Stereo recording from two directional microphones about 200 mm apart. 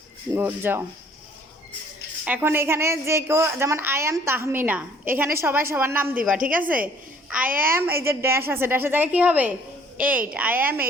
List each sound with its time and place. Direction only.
0.3 s a woman's voice: 10° right (ahead or behind)
2.2 s a woman's voice: 10° right (ahead or behind)
6.3 s speech: 40° right (ahead or behind)
6.8 s a sound: 5° right (ahead or behind)
7.4 s speech: 45° right (ahead or behind)
7.7 s a woman's voice: 10° right (ahead or behind)